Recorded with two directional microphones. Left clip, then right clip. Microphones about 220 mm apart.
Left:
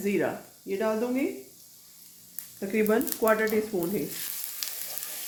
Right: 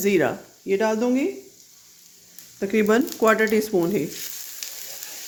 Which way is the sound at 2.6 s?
55° right (ahead or behind).